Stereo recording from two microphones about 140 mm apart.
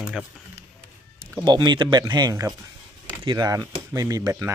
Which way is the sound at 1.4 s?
30° right (ahead or behind).